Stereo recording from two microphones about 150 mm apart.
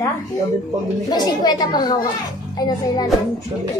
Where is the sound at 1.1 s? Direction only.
25° left (ahead or behind).